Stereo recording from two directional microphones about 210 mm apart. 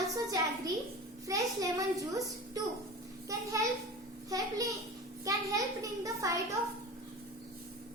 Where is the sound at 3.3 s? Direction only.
15° right (ahead or behind).